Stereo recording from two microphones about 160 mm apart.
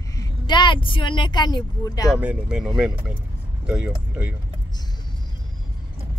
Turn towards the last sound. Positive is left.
turn(degrees=-5)  # may be behind; listen again after turning